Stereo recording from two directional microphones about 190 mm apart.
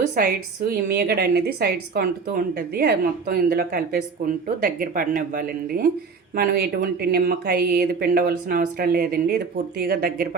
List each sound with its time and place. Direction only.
0.1 s speech: 50° right (ahead or behind)